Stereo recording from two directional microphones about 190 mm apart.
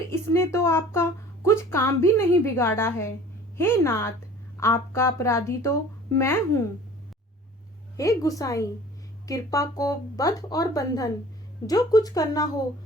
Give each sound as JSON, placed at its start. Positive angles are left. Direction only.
{"t": 0.1, "sound": "speech", "side_deg": 15}
{"t": 8.2, "sound": "speech", "side_deg": 15}